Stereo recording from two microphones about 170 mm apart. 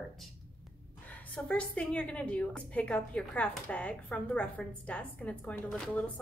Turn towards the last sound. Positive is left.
turn(degrees=5)  # may be behind; listen again after turning